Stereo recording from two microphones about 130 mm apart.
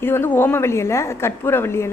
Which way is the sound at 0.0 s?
15° left (ahead or behind).